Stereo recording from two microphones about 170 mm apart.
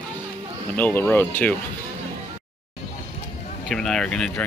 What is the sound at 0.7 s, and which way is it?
Speech, 10° left (ahead or behind).